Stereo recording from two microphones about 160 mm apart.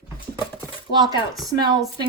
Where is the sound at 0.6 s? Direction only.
25° right (ahead or behind).